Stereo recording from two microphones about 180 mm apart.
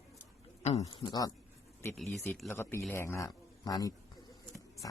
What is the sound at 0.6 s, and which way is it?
Speech, 35° left (ahead or behind).